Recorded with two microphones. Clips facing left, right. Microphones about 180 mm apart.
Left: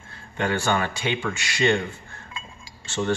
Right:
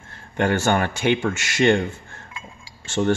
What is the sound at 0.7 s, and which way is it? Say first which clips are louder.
Speech: right 5 dB; 45° right (ahead or behind).